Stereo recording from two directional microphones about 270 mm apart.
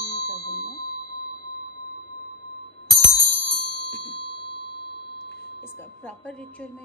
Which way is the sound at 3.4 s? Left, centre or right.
Left.